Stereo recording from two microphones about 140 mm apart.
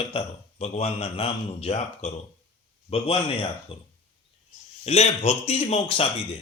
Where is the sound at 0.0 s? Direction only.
45° left (ahead or behind).